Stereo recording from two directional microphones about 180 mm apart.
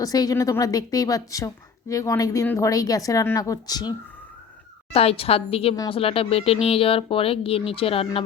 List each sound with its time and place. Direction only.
0.0 s a woman's voice: 20° left (ahead or behind)
4.9 s speech: 35° left (ahead or behind)